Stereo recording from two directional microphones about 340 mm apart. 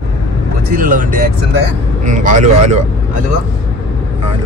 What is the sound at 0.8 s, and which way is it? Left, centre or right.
Speech, right.